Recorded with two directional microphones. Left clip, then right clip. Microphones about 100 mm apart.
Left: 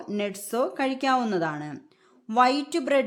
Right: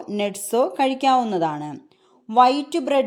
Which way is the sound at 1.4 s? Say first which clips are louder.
Right 6 dB; 15° right (ahead or behind).